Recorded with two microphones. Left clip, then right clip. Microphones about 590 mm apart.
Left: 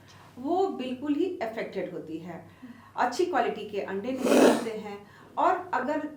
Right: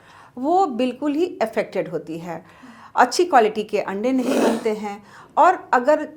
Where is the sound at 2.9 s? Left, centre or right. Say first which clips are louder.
Right 11 dB; right.